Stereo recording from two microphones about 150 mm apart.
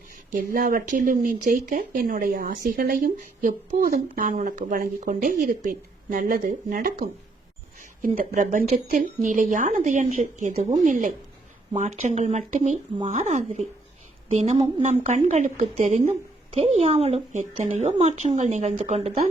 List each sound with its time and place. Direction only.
0.3 s a woman's voice: 65° right (ahead or behind); by 19.1 s 45° right (ahead or behind)